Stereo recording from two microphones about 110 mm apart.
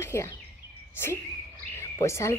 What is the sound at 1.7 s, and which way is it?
Bird, 25° left (ahead or behind).